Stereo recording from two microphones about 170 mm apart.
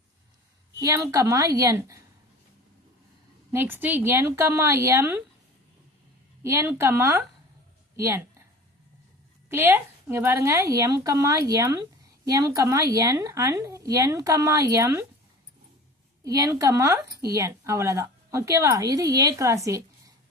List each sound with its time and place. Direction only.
0.8 s a woman's voice: 20° right (ahead or behind)
3.5 s a woman's voice: 10° right (ahead or behind)
6.4 s a woman's voice: 15° right (ahead or behind)
7.9 s a sound: 15° right (ahead or behind)
9.5 s a woman's voice: 15° right (ahead or behind)
16.2 s a woman's voice: 20° right (ahead or behind)